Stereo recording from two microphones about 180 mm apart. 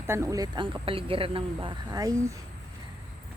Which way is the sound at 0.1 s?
15° right (ahead or behind).